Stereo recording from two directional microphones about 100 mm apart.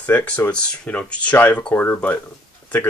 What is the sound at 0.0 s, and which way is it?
Speech, 15° left (ahead or behind).